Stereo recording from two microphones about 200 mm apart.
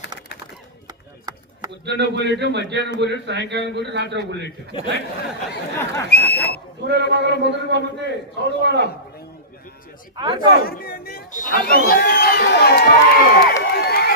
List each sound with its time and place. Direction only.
1.8 s a man's voice: 60° right (ahead or behind)
6.1 s speech: 55° left (ahead or behind)
6.8 s a man's voice: 55° right (ahead or behind)
10.2 s speech: 20° right (ahead or behind)
10.6 s speech: 50° left (ahead or behind)
11.6 s speech: 50° left (ahead or behind)
13.6 s a sound: 55° left (ahead or behind)